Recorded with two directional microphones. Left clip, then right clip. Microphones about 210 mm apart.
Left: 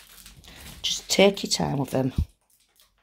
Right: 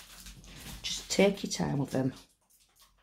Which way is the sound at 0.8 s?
35° left (ahead or behind).